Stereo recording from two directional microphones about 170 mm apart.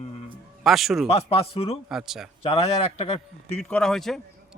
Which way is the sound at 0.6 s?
Centre (ahead or behind).